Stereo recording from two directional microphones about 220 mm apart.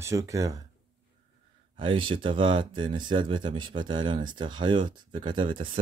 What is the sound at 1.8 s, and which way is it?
Speech, 25° right (ahead or behind).